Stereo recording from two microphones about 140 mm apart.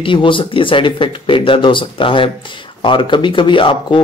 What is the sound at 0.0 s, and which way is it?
Speech, 35° left (ahead or behind).